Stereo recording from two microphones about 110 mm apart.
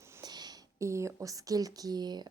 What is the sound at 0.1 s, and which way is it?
A woman's voice, 35° right (ahead or behind).